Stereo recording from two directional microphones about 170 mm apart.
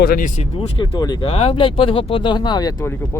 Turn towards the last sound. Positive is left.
turn(degrees=15)  # may be behind; listen again after turning